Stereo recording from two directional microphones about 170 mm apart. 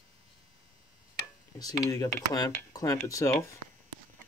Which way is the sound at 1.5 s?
20° left (ahead or behind).